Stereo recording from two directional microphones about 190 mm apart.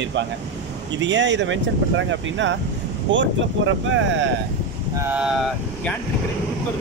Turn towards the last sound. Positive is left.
turn(degrees=0)  # may be behind; listen again after turning